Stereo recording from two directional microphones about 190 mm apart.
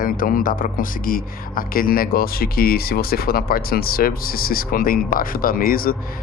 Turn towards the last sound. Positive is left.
turn(degrees=50)  # may be behind; listen again after turning